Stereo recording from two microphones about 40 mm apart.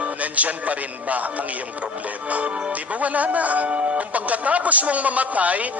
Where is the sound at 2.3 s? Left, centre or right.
Right.